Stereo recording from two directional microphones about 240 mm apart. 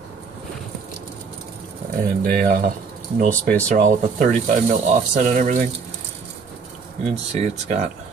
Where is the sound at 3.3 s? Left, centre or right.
Centre.